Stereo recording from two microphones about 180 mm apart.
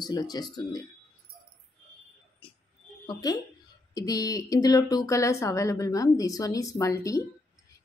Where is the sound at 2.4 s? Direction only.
25° left (ahead or behind).